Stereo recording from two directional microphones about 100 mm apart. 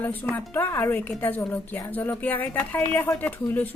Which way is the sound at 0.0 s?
15° left (ahead or behind).